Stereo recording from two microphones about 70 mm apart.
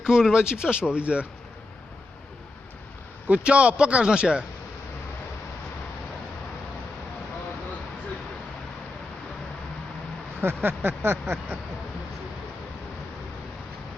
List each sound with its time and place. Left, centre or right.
0.0 s speech: centre
3.2 s speech: centre
10.4 s a sound: right